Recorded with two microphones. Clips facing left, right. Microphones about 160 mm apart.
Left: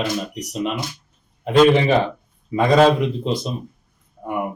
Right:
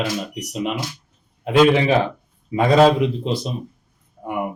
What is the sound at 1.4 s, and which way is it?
Speech, 5° right (ahead or behind).